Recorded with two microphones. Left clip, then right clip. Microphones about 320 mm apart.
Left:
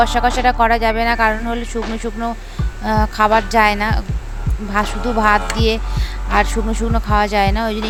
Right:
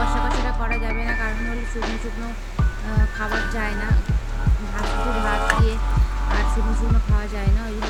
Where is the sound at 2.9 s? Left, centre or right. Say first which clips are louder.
Left 14 dB; left.